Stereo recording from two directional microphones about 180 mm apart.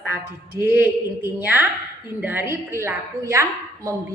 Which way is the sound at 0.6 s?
10° right (ahead or behind).